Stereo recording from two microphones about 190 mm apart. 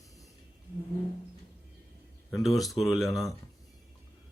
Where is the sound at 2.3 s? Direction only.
Centre (ahead or behind).